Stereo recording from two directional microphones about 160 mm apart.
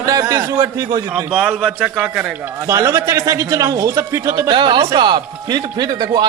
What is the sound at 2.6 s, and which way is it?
A man's voice, 20° right (ahead or behind).